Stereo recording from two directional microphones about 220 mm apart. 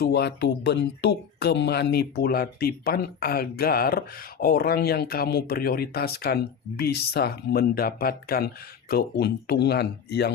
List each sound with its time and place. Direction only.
0.0 s speech: 50° left (ahead or behind)